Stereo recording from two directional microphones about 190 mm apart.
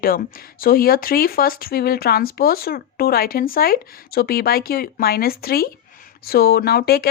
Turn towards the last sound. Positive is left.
turn(degrees=55)  # may be behind; listen again after turning